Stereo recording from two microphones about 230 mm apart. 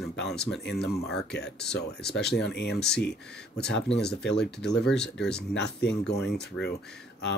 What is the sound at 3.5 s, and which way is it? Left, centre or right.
Speech, left.